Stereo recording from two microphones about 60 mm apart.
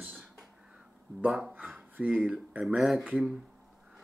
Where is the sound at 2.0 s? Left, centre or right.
Right.